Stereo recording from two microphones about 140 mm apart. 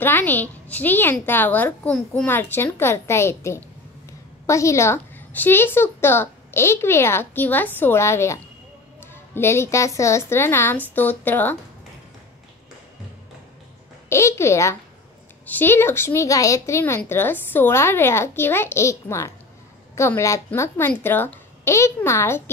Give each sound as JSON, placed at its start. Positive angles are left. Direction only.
{"t": 0.0, "sound": "a woman's voice", "side_deg": 15}
{"t": 14.0, "sound": "a woman's voice", "side_deg": 20}